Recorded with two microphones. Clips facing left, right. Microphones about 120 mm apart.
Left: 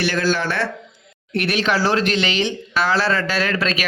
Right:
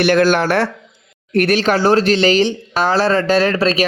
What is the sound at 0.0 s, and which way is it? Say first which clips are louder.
Speech: right 7 dB; 55° right (ahead or behind).